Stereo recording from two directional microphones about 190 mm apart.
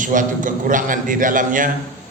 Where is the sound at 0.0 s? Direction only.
45° right (ahead or behind).